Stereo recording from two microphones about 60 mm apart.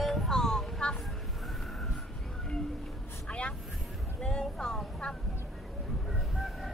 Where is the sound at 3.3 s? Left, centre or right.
Centre.